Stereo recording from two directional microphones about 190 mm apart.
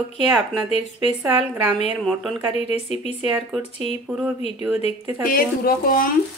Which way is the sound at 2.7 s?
35° left (ahead or behind).